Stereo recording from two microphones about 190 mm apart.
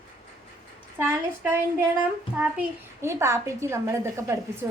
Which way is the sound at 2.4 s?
10° right (ahead or behind).